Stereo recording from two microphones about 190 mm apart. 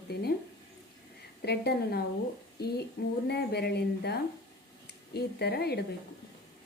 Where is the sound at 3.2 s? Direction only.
60° left (ahead or behind).